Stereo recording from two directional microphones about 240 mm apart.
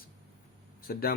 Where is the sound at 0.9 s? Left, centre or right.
Left.